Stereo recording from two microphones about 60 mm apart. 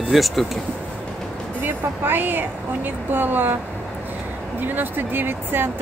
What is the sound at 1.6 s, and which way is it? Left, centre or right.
Speech, right.